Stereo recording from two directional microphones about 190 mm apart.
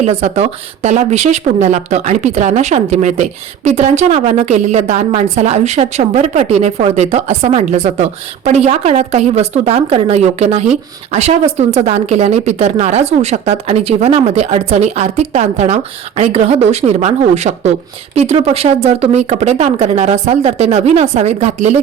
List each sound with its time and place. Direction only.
0.0 s speech: 35° right (ahead or behind)